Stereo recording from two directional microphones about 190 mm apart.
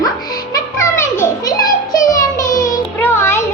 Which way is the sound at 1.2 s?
20° left (ahead or behind).